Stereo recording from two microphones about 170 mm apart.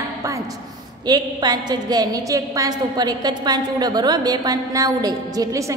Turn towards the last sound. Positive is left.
turn(degrees=-20)  # may be behind; listen again after turning